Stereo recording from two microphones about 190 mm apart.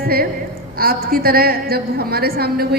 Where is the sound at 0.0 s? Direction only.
50° right (ahead or behind).